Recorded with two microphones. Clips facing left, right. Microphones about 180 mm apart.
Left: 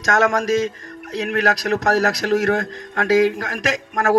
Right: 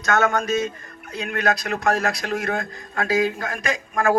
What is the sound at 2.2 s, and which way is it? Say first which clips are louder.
Speech: left 7 dB; 85° left.